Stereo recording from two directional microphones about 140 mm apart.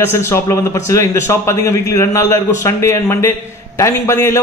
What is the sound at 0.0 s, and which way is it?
A man's voice, 20° left (ahead or behind).